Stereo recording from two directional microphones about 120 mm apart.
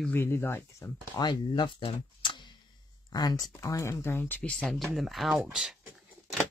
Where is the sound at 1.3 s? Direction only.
40° left (ahead or behind); by 4.5 s 15° left (ahead or behind).